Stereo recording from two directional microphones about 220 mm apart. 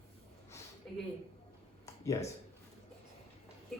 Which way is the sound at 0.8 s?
5° left (ahead or behind).